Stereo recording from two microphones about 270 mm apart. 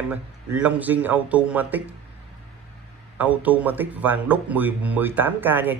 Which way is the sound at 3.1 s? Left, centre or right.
Centre.